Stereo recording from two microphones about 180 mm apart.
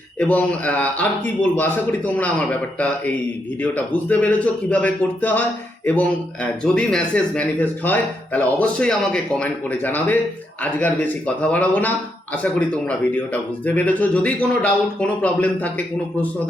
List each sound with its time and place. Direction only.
0.2 s a man's voice: 10° left (ahead or behind)